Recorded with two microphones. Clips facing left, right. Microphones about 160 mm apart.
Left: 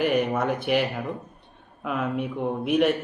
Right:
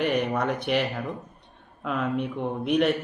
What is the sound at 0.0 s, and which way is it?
A man's voice, 5° left (ahead or behind).